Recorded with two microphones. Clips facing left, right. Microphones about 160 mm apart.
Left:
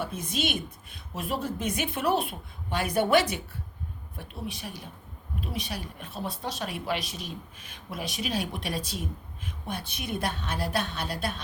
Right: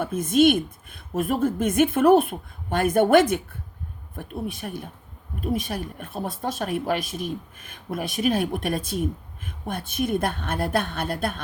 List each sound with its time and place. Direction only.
0.0 s speech: 50° right (ahead or behind)